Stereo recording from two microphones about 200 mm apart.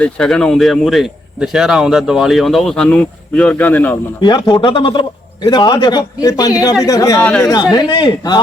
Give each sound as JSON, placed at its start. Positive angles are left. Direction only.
{"t": 0.0, "sound": "speech", "side_deg": 5}
{"t": 4.2, "sound": "a man's voice", "side_deg": 20}